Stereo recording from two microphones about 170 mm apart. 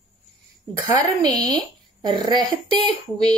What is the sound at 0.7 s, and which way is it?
Speech, 25° right (ahead or behind).